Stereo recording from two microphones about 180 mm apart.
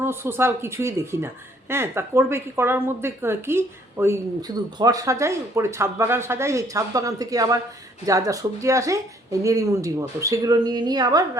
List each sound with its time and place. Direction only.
0.0 s a woman's voice: 15° right (ahead or behind)